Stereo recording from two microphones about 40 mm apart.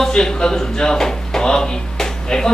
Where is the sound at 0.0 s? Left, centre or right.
Centre.